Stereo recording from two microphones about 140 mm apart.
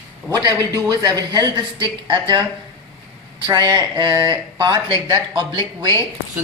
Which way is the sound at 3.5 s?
30° right (ahead or behind).